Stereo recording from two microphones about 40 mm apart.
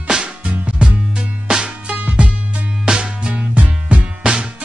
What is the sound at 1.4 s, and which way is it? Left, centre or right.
Music, right.